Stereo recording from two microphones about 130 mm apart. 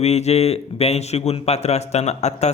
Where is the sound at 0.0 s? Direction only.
55° left (ahead or behind).